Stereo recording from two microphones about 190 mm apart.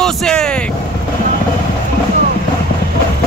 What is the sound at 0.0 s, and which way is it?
Vehicle, 5° left (ahead or behind).